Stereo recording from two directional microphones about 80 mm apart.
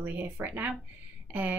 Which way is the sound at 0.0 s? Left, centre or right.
Right.